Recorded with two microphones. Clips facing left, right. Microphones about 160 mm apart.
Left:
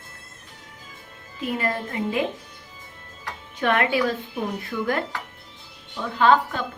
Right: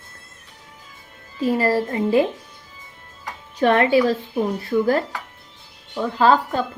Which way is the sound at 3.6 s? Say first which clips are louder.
Right 6 dB; 35° right (ahead or behind).